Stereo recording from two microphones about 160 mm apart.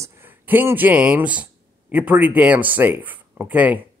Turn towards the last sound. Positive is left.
turn(degrees=-10)  # may be behind; listen again after turning